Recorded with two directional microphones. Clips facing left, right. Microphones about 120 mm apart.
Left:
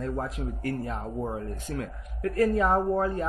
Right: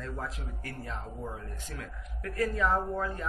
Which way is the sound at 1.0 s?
40° left (ahead or behind).